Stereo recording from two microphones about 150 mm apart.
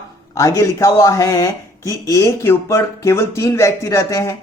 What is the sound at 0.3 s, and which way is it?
Speech, 20° left (ahead or behind).